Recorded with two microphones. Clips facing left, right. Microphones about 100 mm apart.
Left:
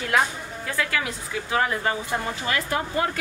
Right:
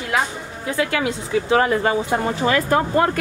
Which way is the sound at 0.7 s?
25° right (ahead or behind).